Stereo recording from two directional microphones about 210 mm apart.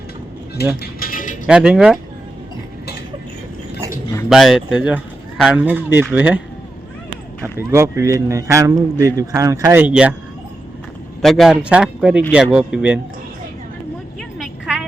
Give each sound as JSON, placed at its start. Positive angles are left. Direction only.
{"t": 0.8, "sound": "music", "side_deg": 45}
{"t": 1.5, "sound": "speech", "side_deg": -5}
{"t": 4.3, "sound": "speech", "side_deg": 0}
{"t": 7.4, "sound": "speech", "side_deg": -10}
{"t": 11.2, "sound": "speech", "side_deg": 0}
{"t": 14.2, "sound": "a sound", "side_deg": 0}